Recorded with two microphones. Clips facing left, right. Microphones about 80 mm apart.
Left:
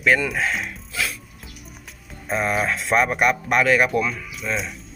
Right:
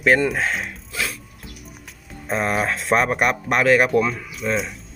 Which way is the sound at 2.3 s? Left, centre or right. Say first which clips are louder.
Right 1 dB; right.